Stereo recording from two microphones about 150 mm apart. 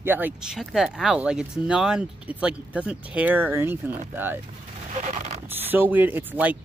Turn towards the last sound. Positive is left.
turn(degrees=-10)  # may be behind; listen again after turning